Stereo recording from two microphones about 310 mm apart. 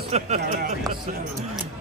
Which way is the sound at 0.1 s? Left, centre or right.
Right.